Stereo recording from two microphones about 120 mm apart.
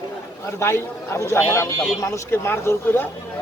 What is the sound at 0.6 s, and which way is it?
Speech, 20° left (ahead or behind).